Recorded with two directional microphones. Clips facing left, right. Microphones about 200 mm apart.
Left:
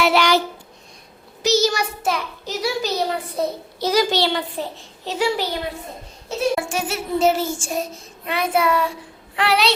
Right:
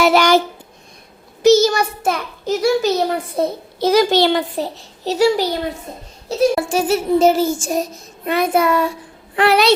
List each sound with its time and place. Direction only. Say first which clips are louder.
0.0 s a sound: right 4 dB; 45° right (ahead or behind)
1.4 s a child's voice: right 7 dB; 50° right (ahead or behind)
6.2 s child singing: right 5 dB; 35° right (ahead or behind)
9.3 s speech: right 6 dB; 50° right (ahead or behind)